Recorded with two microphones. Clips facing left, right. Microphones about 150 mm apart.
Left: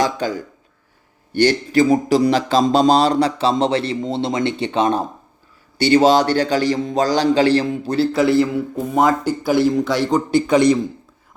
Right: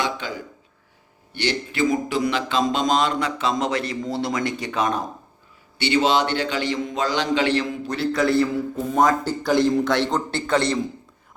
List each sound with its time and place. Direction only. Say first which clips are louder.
0.0 s speech: left 7 dB; 40° left (ahead or behind)
5.7 s a man's voice: left 7 dB; 40° left (ahead or behind); by 10.8 s 15° left (ahead or behind)